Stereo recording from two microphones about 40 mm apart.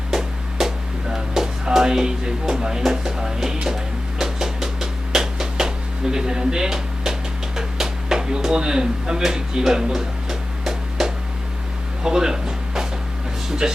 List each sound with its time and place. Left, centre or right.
0.1 s music: centre
1.1 s speech: centre
4.2 s a sound: centre
12.0 s music: centre
13.6 s speech: centre